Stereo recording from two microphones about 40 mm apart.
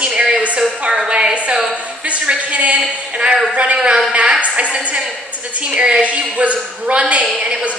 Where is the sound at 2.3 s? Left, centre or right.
Right.